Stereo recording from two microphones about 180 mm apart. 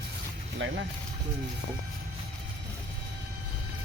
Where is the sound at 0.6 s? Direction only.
90° right.